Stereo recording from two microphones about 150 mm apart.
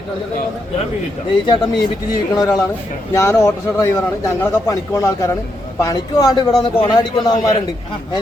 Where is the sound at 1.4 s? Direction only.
30° left (ahead or behind).